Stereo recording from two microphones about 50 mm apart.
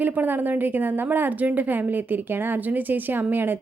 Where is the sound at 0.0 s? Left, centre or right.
Right.